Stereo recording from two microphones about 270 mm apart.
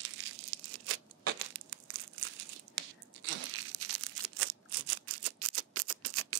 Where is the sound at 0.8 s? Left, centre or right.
Right.